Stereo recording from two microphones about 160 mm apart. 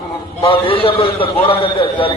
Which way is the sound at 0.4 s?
35° left (ahead or behind).